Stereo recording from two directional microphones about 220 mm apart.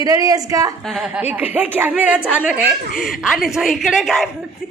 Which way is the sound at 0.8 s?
Centre (ahead or behind).